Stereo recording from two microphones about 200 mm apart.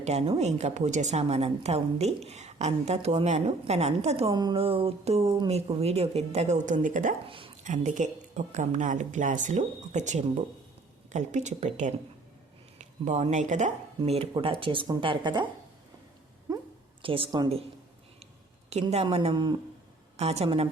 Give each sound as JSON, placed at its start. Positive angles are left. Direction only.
{"t": 0.0, "sound": "a woman's voice", "side_deg": -30}
{"t": 4.3, "sound": "a woman's voice", "side_deg": -20}
{"t": 7.3, "sound": "speech", "side_deg": -25}
{"t": 7.6, "sound": "a woman's voice", "side_deg": -40}
{"t": 16.5, "sound": "a sound", "side_deg": -20}
{"t": 17.0, "sound": "speech", "side_deg": -25}
{"t": 18.7, "sound": "a woman's voice", "side_deg": -30}